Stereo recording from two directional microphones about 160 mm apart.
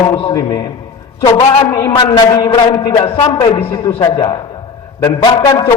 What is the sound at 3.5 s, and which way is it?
A man's voice, 25° left (ahead or behind).